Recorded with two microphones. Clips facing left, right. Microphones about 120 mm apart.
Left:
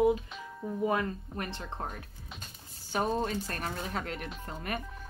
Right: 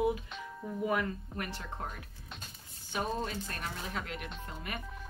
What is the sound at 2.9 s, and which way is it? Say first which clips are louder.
Speech: left 5 dB; 45° left (ahead or behind).